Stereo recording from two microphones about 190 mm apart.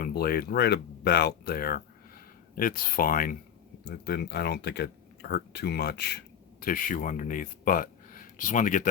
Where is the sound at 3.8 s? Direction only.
60° left (ahead or behind).